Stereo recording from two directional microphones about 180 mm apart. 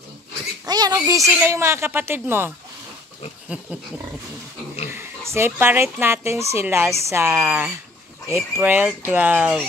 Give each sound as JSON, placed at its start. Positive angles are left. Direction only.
{"t": 0.7, "sound": "a sound", "side_deg": -20}
{"t": 0.9, "sound": "speech", "side_deg": -15}
{"t": 4.9, "sound": "speech", "side_deg": -15}